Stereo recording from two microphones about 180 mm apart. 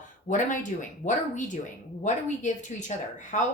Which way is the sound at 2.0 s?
40° left (ahead or behind).